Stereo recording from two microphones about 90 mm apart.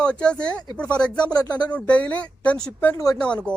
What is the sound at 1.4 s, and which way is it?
Speech, 50° left (ahead or behind).